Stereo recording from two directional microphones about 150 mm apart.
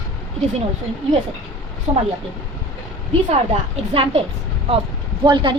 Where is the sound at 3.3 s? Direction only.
45° right (ahead or behind).